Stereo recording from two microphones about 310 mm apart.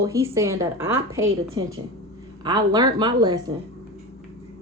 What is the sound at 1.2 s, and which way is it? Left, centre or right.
Speech, right.